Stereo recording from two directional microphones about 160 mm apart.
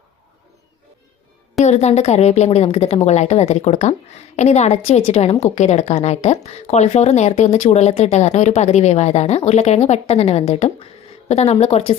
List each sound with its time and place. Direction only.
1.6 s a woman's voice: 45° left (ahead or behind)